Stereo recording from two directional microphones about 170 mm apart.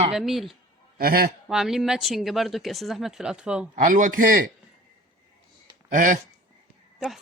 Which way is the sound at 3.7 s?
50° right (ahead or behind).